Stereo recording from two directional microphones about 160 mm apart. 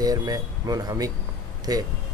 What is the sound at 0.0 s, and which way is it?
Speech, 25° right (ahead or behind).